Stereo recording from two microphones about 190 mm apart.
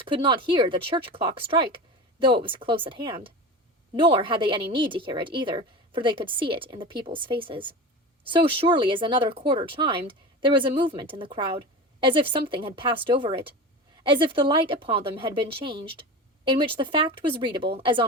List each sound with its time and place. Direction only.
0.0 s a woman's voice: 25° right (ahead or behind)